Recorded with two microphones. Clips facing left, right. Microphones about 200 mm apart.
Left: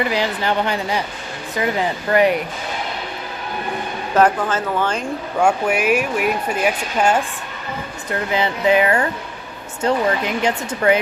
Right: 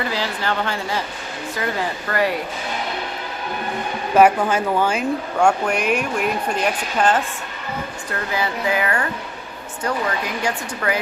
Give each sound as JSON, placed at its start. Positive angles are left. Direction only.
{"t": 0.0, "sound": "speech", "side_deg": 15}
{"t": 4.1, "sound": "speech", "side_deg": -10}
{"t": 5.4, "sound": "speech", "side_deg": 5}
{"t": 8.1, "sound": "speech", "side_deg": 20}